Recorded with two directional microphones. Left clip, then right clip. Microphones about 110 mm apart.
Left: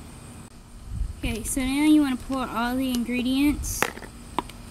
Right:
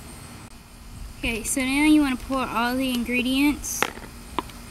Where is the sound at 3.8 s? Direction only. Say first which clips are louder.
Right 1 dB; 15° left (ahead or behind).